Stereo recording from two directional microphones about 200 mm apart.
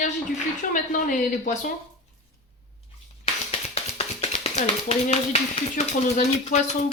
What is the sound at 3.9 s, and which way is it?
Speech, 30° left (ahead or behind).